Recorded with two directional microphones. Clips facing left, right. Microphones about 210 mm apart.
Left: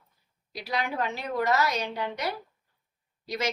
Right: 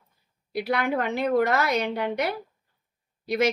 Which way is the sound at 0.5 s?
60° right (ahead or behind).